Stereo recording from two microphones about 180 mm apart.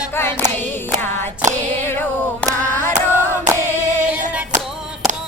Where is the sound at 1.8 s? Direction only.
10° left (ahead or behind).